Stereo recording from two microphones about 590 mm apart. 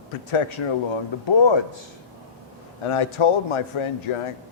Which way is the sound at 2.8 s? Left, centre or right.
Left.